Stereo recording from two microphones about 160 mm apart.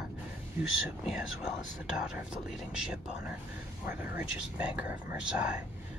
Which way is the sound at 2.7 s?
5° right (ahead or behind).